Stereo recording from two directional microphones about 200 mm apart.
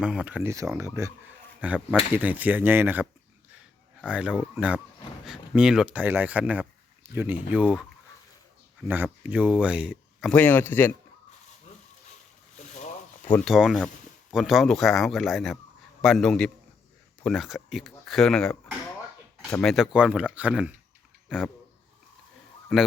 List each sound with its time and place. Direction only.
0.0 s speech: 5° right (ahead or behind)
4.1 s speech: 5° right (ahead or behind)
9.0 s speech: 5° right (ahead or behind)
10.3 s speech: 10° left (ahead or behind)
11.7 s a sound: 35° left (ahead or behind)
13.3 s speech: centre (ahead or behind)